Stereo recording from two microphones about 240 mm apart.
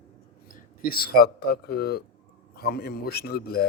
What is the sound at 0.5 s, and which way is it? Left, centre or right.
Speech, left.